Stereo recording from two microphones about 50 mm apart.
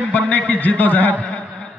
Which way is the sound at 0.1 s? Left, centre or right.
Left.